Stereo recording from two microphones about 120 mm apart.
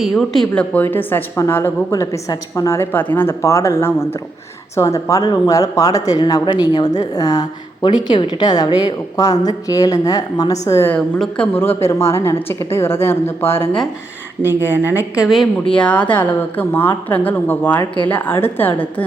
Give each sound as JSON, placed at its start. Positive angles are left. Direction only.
{"t": 0.0, "sound": "a woman's voice", "side_deg": 0}
{"t": 10.9, "sound": "a woman's voice", "side_deg": 10}
{"t": 14.6, "sound": "speech", "side_deg": -15}